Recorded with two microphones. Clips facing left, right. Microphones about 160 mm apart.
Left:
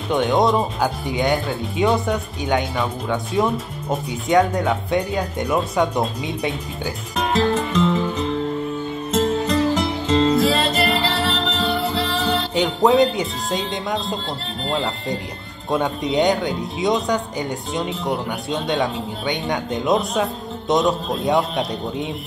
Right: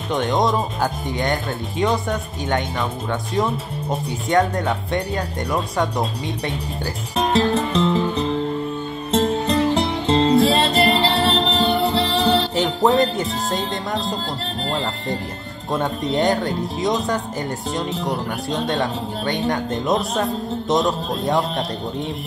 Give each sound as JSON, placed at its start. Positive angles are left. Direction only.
{"t": 0.1, "sound": "speech", "side_deg": 0}
{"t": 7.2, "sound": "music", "side_deg": -30}
{"t": 9.1, "sound": "music", "side_deg": -30}
{"t": 12.5, "sound": "speech", "side_deg": 0}
{"t": 16.1, "sound": "speech", "side_deg": 0}